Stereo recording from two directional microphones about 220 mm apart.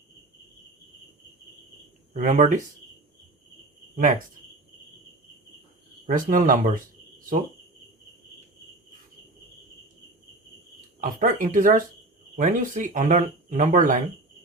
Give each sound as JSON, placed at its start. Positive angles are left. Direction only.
{"t": 2.1, "sound": "speech", "side_deg": -35}
{"t": 3.9, "sound": "speech", "side_deg": -35}
{"t": 6.1, "sound": "speech", "side_deg": -35}
{"t": 11.0, "sound": "speech", "side_deg": -40}